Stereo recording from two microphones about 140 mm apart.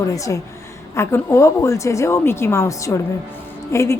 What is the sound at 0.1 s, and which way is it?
A woman's voice, 25° left (ahead or behind).